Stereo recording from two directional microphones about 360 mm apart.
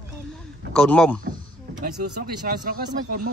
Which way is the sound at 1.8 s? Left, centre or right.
Right.